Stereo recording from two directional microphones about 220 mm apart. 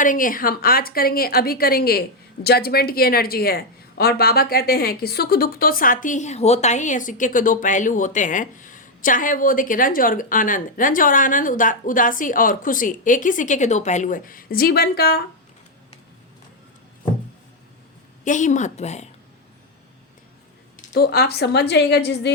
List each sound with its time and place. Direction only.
0.0 s a woman's voice: 40° left (ahead or behind)
18.3 s a woman's voice: 35° left (ahead or behind)
20.9 s a woman's voice: 45° left (ahead or behind)